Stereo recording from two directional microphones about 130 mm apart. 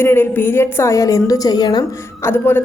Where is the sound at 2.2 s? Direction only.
15° left (ahead or behind).